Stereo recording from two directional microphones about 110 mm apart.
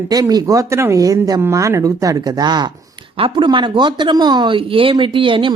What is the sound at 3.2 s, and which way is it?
Speech, 50° right (ahead or behind).